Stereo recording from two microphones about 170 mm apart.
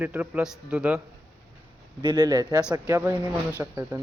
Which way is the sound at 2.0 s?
25° right (ahead or behind).